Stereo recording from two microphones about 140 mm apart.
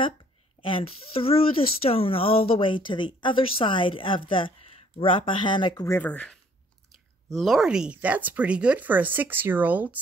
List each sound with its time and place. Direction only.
0.6 s a woman's voice: 40° left (ahead or behind)
5.9 s speech: 15° left (ahead or behind); by 9.9 s 10° right (ahead or behind)